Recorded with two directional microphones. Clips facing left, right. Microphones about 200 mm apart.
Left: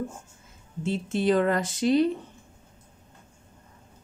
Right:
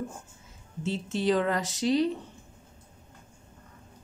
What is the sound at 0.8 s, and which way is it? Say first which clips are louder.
A woman's voice: left 3 dB; 55° left (ahead or behind).